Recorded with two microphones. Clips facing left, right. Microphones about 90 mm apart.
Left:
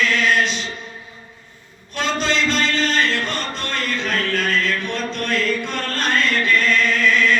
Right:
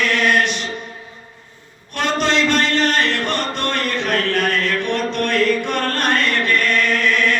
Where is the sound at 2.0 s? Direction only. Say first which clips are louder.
Right 3 dB; 55° right (ahead or behind).